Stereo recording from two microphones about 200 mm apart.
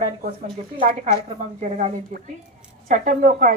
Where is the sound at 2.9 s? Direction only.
40° right (ahead or behind).